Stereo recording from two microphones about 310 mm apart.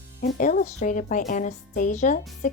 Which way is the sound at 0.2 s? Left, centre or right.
Left.